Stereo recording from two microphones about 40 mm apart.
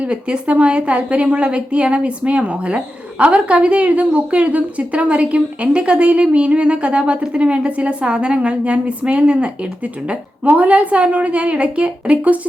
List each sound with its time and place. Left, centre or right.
0.0 s a woman's voice: right